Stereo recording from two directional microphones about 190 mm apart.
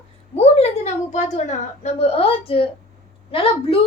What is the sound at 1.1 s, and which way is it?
A child's voice, 35° left (ahead or behind).